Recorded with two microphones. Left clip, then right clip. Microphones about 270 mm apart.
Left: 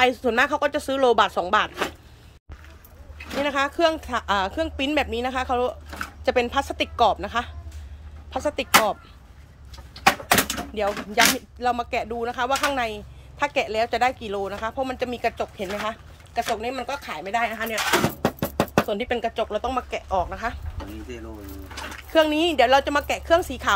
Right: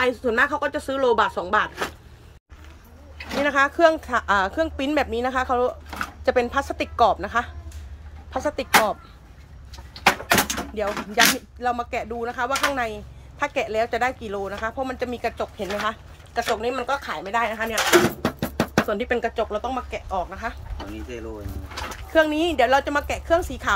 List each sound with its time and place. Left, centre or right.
0.0 s speech: centre
3.3 s speech: centre
10.7 s speech: centre
18.4 s music: centre
18.9 s speech: centre
22.1 s speech: centre